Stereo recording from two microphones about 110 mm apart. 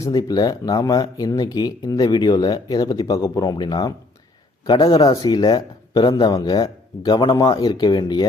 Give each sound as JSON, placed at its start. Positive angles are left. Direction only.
{"t": 0.0, "sound": "speech", "side_deg": 35}